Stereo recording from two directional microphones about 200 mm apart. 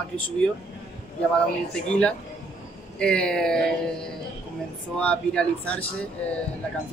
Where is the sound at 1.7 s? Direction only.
5° left (ahead or behind).